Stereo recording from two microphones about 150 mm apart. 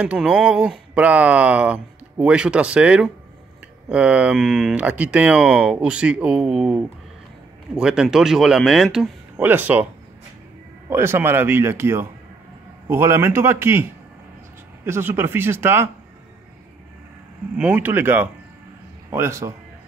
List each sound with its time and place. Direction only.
0.0 s speech: 5° right (ahead or behind)
9.4 s speech: 10° right (ahead or behind)
10.9 s speech: 15° right (ahead or behind)
14.9 s speech: 15° right (ahead or behind)
17.6 s a man's voice: 10° right (ahead or behind)